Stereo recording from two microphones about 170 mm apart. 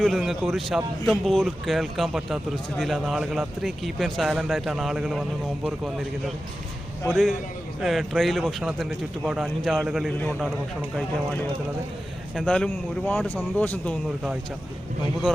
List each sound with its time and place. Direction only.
0.0 s speech: centre (ahead or behind)
12.4 s speech: 5° left (ahead or behind)